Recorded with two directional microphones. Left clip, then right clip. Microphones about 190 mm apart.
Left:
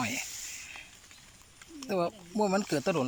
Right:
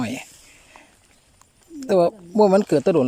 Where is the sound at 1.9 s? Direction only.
55° right (ahead or behind).